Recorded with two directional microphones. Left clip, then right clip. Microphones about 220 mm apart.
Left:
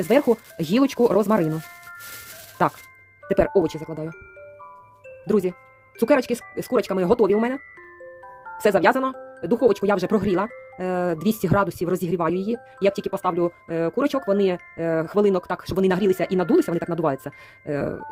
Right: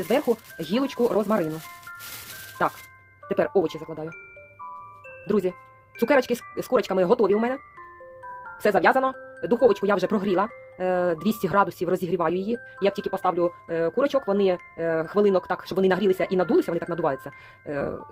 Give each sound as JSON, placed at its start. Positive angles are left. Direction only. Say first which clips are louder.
{"t": 0.0, "sound": "speech", "louder": "left 4 dB", "side_deg": 50}
{"t": 2.6, "sound": "speech", "louder": "left 3 dB", "side_deg": 50}
{"t": 5.2, "sound": "speech", "louder": "left 2 dB", "side_deg": 40}
{"t": 8.6, "sound": "speech", "louder": "left 1 dB", "side_deg": 45}